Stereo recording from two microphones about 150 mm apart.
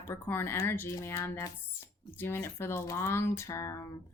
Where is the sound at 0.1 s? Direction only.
15° left (ahead or behind).